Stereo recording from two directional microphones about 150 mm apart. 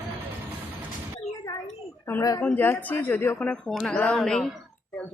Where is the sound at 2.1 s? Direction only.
25° left (ahead or behind).